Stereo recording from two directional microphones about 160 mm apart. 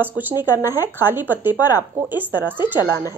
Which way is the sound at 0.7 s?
15° right (ahead or behind).